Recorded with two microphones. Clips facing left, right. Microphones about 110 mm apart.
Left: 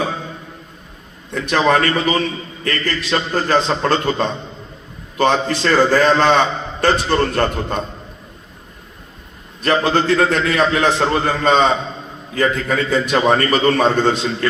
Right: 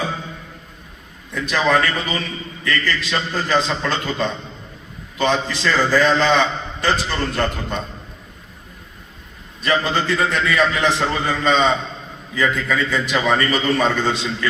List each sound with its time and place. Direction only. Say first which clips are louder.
1.3 s a man's voice: left 3 dB; 50° left (ahead or behind)
9.6 s a man's voice: left 4 dB; 55° left (ahead or behind)